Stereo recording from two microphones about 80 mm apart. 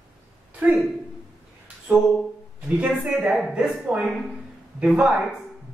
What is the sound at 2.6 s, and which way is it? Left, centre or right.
Speech, centre.